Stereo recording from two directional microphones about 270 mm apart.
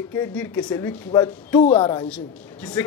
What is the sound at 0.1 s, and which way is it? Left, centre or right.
A man's voice, centre.